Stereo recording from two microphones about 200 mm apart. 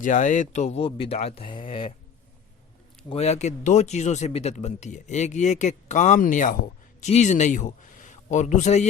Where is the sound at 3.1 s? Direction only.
30° left (ahead or behind).